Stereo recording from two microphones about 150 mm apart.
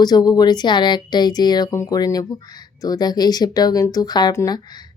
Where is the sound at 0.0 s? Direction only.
25° left (ahead or behind).